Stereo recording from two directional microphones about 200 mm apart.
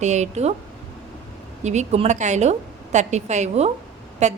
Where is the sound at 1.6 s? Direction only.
35° right (ahead or behind).